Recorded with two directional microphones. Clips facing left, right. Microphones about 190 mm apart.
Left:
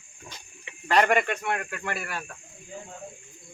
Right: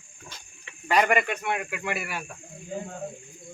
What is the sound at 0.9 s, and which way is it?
A man's voice, 5° right (ahead or behind).